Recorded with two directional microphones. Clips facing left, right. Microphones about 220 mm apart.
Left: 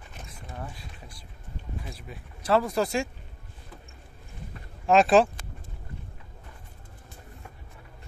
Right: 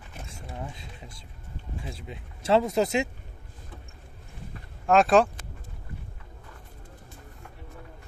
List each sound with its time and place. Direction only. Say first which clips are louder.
0.3 s a sound: right 1 dB; 25° right (ahead or behind)
1.8 s speech: right 2 dB; 25° right (ahead or behind)
4.8 s speech: even; centre (ahead or behind)